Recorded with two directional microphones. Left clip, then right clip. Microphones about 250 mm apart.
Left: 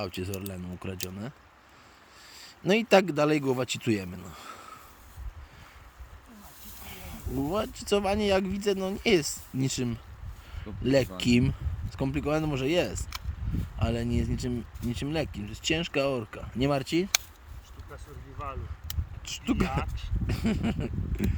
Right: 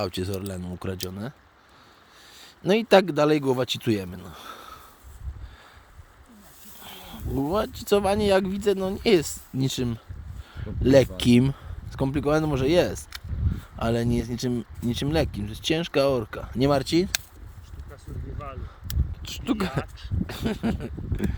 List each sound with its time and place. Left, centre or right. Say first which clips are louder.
0.2 s speech: right 5 dB; right
2.3 s a man's voice: right 3 dB; centre
6.8 s speech: right 4 dB; centre
17.9 s speech: right 3 dB; centre
19.2 s speech: right 2 dB; centre
19.8 s speech: even; centre
20.2 s speech: right 2 dB; centre